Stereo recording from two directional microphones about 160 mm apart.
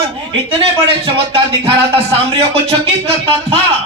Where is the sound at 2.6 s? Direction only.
40° right (ahead or behind).